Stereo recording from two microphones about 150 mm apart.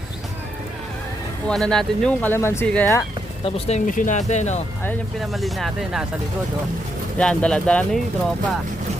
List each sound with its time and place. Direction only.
1.5 s speech: 5° left (ahead or behind)
3.4 s speech: 50° left (ahead or behind)
5.2 s speech: centre (ahead or behind)
7.2 s speech: 5° left (ahead or behind)